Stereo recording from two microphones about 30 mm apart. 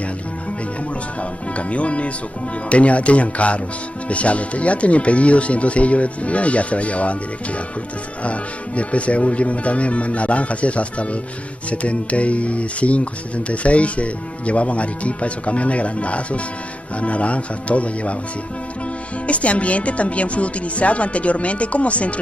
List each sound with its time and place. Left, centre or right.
1.7 s speech: left
19.2 s speech: left